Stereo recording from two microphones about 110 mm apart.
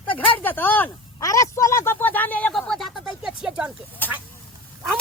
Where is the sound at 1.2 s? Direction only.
30° left (ahead or behind); by 2.6 s 15° left (ahead or behind).